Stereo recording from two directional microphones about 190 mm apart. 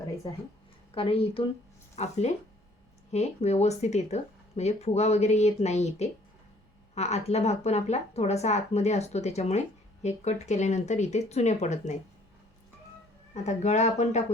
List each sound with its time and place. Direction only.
0.9 s speech: 30° left (ahead or behind)
13.3 s speech: 35° left (ahead or behind)